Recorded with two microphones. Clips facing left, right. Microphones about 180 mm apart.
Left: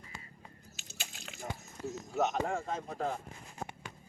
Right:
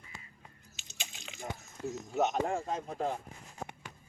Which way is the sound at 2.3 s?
10° right (ahead or behind).